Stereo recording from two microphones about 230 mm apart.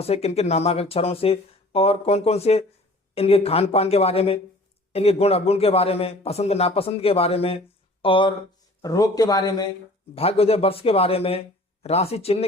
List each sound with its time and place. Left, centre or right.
0.0 s a man's voice: left